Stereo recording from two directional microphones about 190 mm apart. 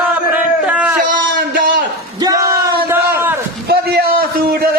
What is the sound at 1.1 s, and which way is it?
Speech, 50° right (ahead or behind).